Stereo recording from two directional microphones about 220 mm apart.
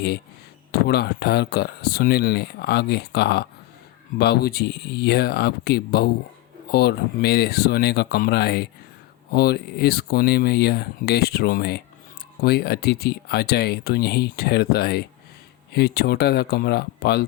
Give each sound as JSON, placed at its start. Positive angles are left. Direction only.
{"t": 0.7, "sound": "speech", "side_deg": 45}